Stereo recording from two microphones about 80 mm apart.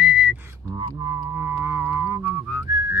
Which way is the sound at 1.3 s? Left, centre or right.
Right.